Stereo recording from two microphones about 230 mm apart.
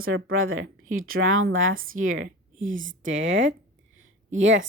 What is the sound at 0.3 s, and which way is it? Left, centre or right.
Speech, right.